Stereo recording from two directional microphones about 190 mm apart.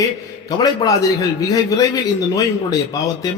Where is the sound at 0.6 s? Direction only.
20° left (ahead or behind).